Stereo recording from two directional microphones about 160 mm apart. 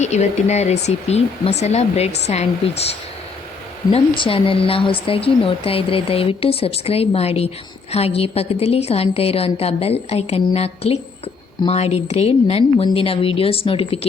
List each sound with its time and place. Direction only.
0.0 s speech: 45° left (ahead or behind)
3.9 s speech: 35° left (ahead or behind)